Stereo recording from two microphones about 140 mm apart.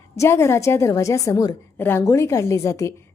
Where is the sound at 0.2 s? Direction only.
20° left (ahead or behind).